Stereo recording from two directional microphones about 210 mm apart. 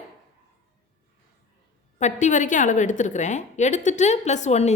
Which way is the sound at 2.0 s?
35° left (ahead or behind).